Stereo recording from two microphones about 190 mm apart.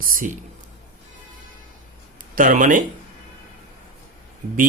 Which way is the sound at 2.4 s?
45° right (ahead or behind).